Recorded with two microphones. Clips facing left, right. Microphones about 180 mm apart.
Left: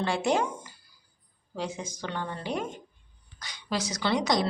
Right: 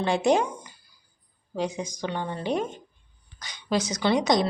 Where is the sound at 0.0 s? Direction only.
20° right (ahead or behind).